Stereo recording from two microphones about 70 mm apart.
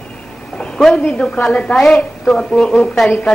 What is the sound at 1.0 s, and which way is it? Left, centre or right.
A woman's voice, centre.